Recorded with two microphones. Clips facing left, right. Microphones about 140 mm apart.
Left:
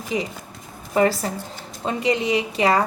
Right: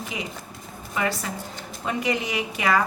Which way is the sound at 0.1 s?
35° left (ahead or behind).